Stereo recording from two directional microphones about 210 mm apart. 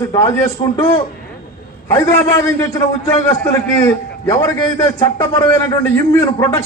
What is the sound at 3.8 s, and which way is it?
A man's voice, 15° left (ahead or behind).